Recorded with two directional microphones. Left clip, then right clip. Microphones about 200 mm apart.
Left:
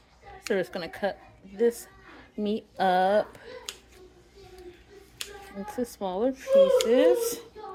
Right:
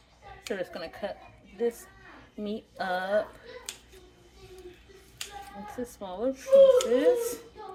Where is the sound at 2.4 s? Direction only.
50° left (ahead or behind).